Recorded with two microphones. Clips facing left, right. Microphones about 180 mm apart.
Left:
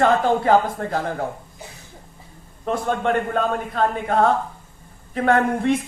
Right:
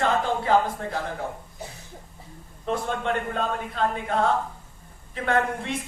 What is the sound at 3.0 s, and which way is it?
A man's voice, 50° left (ahead or behind).